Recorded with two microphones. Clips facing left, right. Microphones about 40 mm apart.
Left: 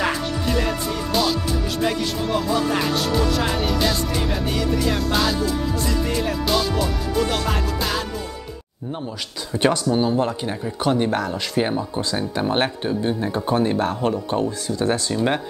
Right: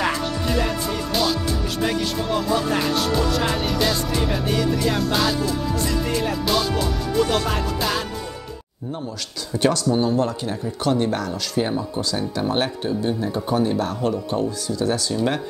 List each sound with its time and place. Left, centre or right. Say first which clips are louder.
0.5 s music: left 1 dB; centre
9.5 s speech: even; left